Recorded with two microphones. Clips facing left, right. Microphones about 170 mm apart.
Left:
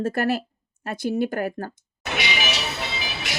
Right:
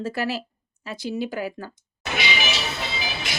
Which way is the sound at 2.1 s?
70° left (ahead or behind).